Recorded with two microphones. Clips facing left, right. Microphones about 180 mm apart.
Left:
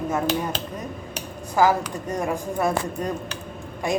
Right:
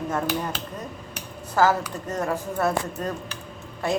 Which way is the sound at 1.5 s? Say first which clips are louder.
Left 1 dB; 10° left (ahead or behind).